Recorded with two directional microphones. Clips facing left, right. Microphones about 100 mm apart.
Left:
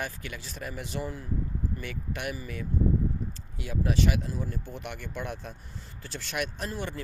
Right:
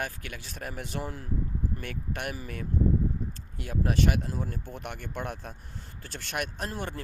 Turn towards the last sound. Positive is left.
turn(degrees=-50)  # may be behind; listen again after turning